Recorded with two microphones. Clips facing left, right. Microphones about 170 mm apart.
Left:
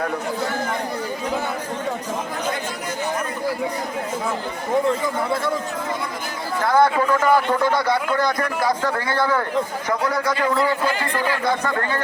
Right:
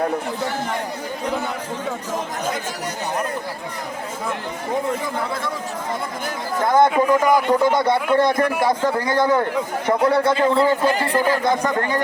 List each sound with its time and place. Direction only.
6.6 s speech: 20° right (ahead or behind); by 11.3 s 35° right (ahead or behind)
11.4 s a man's voice: 20° right (ahead or behind)